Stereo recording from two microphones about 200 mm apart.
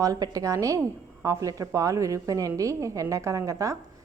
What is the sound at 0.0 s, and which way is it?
A woman's voice, 15° right (ahead or behind).